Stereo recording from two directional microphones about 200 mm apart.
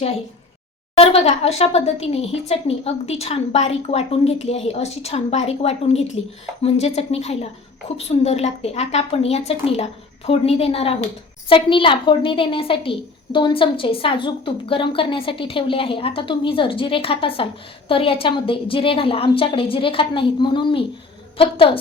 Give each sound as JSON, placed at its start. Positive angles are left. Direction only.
{"t": 0.9, "sound": "a woman's voice", "side_deg": 30}